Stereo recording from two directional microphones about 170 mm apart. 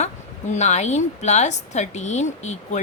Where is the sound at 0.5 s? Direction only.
40° left (ahead or behind).